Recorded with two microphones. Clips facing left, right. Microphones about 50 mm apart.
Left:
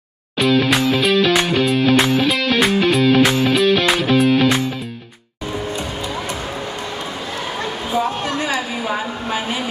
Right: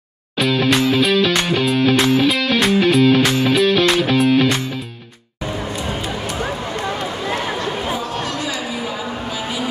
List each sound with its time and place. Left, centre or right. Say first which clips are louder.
0.4 s music: left 1 dB; centre
7.0 s run: right 4 dB; right
8.0 s a sound: left 3 dB; left